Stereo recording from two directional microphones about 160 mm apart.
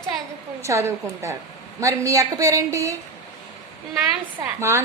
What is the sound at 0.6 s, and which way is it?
A woman's voice, 20° right (ahead or behind).